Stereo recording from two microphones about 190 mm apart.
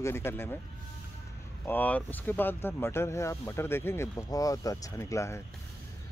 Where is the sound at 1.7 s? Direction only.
10° left (ahead or behind).